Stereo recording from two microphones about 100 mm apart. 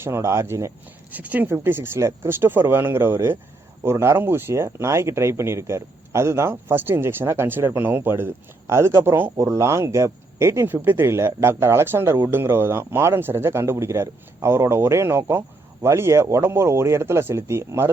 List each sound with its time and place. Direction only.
0.0 s speech: 25° right (ahead or behind)
1.1 s speech: 15° right (ahead or behind)